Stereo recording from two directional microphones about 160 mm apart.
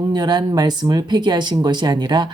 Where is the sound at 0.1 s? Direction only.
25° right (ahead or behind).